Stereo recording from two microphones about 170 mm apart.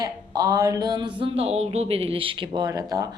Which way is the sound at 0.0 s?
20° right (ahead or behind).